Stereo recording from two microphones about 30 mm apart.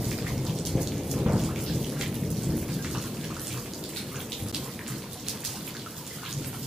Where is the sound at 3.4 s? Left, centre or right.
Centre.